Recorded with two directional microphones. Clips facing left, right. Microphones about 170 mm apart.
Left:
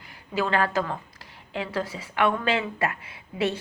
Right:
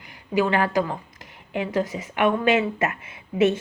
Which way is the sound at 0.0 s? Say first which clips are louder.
Right 5 dB; 15° right (ahead or behind).